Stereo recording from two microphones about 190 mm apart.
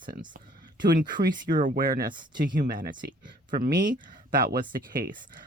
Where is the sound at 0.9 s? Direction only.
45° right (ahead or behind).